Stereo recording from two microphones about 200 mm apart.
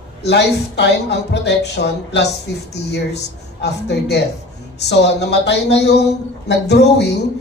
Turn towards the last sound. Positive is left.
turn(degrees=55)  # may be behind; listen again after turning